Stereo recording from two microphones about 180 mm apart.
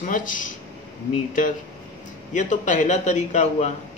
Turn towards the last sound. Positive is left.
turn(degrees=40)  # may be behind; listen again after turning